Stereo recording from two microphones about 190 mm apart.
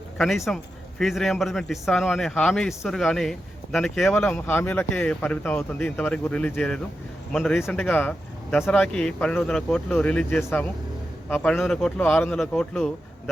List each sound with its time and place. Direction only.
0.2 s a man's voice: centre (ahead or behind)